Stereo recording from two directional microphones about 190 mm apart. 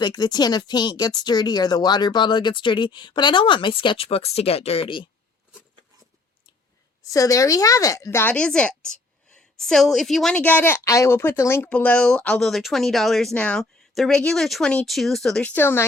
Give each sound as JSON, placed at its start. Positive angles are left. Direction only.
{"t": 0.0, "sound": "speech", "side_deg": 20}
{"t": 7.0, "sound": "a woman's voice", "side_deg": 15}